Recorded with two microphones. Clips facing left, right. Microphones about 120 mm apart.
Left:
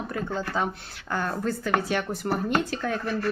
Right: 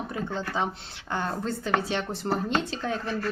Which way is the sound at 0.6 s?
20° right (ahead or behind).